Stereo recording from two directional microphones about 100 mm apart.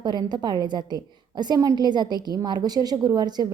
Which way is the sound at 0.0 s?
45° right (ahead or behind).